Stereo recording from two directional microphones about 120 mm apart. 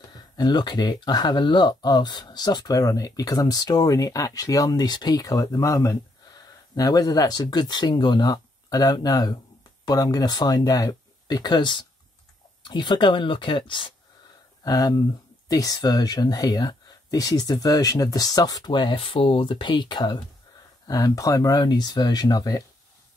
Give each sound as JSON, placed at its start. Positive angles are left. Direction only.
{"t": 0.1, "sound": "speech", "side_deg": 35}